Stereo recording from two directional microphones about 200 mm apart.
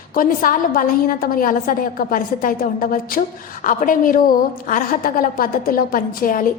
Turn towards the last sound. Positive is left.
turn(degrees=45)  # may be behind; listen again after turning